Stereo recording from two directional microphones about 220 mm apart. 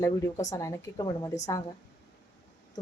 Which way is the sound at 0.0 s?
15° left (ahead or behind).